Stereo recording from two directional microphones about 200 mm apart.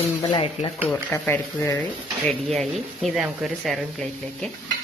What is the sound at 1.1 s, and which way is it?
Speech, 10° left (ahead or behind).